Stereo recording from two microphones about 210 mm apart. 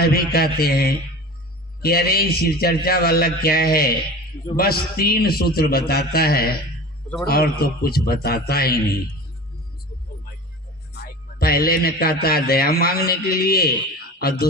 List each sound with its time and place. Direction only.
0.0 s a man's voice: 45° left (ahead or behind)
10.9 s a man's voice: 45° left (ahead or behind)